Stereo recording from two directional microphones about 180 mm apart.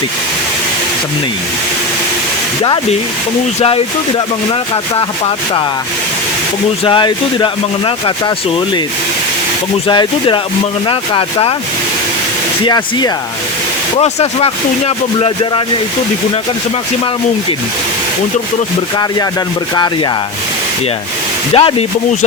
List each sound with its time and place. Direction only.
4.7 s speech: 30° left (ahead or behind)
6.8 s speech: 25° left (ahead or behind)
9.8 s speech: 25° left (ahead or behind)
12.6 s speech: 25° left (ahead or behind)
14.0 s speech: 35° left (ahead or behind)
18.9 s speech: 20° left (ahead or behind)
21.5 s speech: 30° left (ahead or behind)